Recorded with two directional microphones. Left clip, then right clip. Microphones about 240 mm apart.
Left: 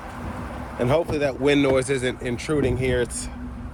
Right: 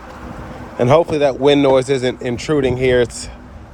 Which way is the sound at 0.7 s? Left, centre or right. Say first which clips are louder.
Right 9 dB; right.